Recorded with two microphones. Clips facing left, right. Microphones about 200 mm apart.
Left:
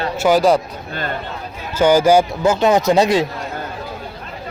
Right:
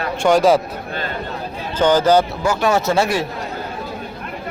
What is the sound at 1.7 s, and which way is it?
Speech, 10° left (ahead or behind).